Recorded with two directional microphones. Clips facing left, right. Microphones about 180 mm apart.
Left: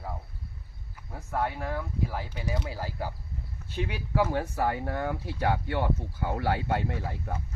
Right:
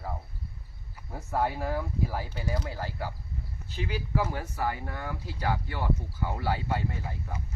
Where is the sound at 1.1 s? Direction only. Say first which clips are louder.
Right 2 dB; 5° right (ahead or behind).